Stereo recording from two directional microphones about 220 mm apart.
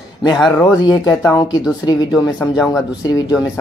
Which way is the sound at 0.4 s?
Centre (ahead or behind).